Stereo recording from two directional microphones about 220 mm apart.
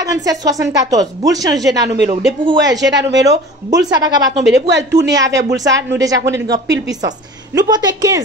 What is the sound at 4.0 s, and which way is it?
Speech, 15° right (ahead or behind).